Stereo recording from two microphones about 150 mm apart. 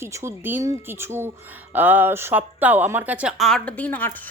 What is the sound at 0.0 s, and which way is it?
A woman's voice, 20° right (ahead or behind).